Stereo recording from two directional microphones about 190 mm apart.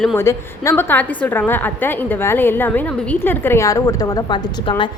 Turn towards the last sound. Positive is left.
turn(degrees=25)  # may be behind; listen again after turning